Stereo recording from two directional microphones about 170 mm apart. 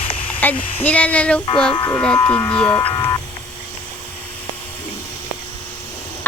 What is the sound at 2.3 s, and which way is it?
Speech, 10° left (ahead or behind).